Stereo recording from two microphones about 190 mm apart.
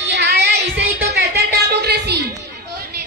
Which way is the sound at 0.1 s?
55° right (ahead or behind).